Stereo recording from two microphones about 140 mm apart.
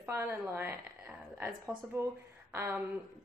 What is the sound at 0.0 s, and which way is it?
A woman's voice, 15° right (ahead or behind).